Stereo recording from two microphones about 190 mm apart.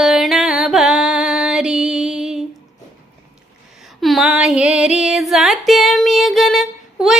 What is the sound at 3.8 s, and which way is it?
Female singing, centre (ahead or behind).